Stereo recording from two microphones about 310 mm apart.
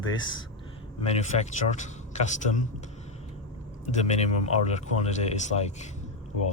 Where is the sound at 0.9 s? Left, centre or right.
Left.